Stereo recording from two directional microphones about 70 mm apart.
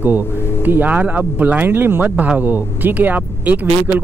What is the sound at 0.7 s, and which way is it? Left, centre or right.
Speech, right.